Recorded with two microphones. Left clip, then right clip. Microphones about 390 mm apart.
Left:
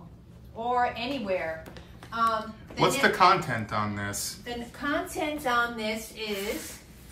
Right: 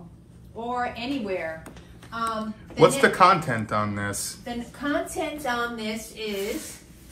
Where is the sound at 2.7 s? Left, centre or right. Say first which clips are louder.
Right 5 dB; centre.